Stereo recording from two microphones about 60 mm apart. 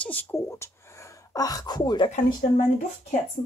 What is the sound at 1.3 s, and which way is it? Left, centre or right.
Speech, left.